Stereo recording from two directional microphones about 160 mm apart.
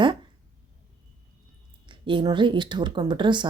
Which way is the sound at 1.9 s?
30° right (ahead or behind).